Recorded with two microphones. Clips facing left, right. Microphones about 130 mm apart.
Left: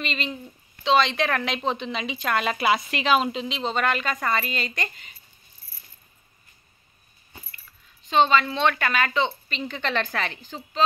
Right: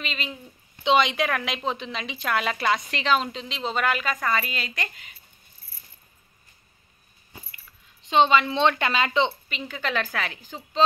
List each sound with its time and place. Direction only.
0.0 s a woman's voice: 5° right (ahead or behind)
0.8 s speech: 15° right (ahead or behind)
1.1 s a woman's voice: 5° right (ahead or behind)
8.0 s a woman's voice: 20° right (ahead or behind)
9.5 s a woman's voice: 5° right (ahead or behind)